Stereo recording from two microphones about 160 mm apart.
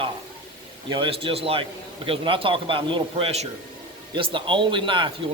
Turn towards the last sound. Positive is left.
turn(degrees=-30)  # may be behind; listen again after turning